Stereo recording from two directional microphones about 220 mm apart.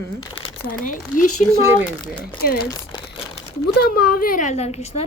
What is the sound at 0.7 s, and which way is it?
Speech, 35° left (ahead or behind).